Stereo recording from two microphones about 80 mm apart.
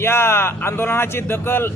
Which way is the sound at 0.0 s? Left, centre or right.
Left.